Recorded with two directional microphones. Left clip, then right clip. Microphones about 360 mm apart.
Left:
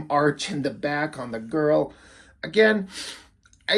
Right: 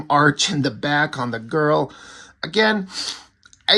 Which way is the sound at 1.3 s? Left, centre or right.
Right.